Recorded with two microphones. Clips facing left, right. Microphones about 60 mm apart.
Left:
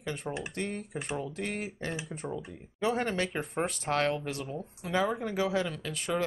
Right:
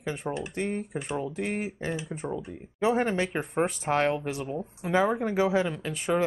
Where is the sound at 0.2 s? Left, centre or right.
Centre.